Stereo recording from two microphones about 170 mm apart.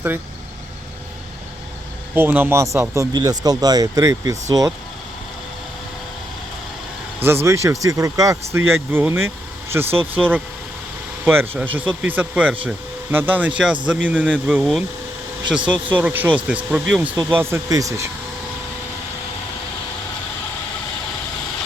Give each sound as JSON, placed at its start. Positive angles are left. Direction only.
{"t": 2.1, "sound": "speech", "side_deg": -10}
{"t": 7.3, "sound": "speech", "side_deg": -15}